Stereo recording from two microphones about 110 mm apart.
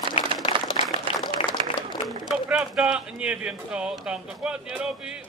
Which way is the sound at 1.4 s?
55° left (ahead or behind).